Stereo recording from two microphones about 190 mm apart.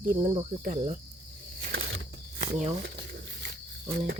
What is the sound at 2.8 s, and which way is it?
Crumpling, 60° right (ahead or behind).